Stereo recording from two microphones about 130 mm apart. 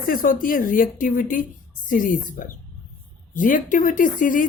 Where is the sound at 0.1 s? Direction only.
90° left.